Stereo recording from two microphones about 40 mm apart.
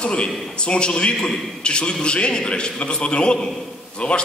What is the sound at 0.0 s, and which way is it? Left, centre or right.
A man's voice, left.